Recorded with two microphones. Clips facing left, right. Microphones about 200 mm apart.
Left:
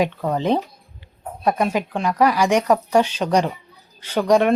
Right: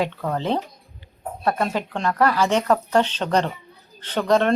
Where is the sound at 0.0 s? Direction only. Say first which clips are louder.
Left 4 dB; 15° left (ahead or behind).